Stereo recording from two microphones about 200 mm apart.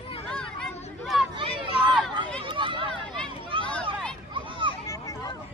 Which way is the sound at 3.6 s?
5° left (ahead or behind).